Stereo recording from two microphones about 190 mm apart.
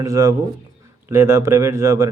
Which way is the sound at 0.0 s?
15° right (ahead or behind).